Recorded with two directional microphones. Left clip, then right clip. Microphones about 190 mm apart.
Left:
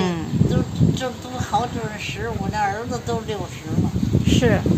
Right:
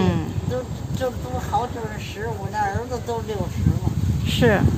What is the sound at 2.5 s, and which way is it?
Speech, 20° left (ahead or behind).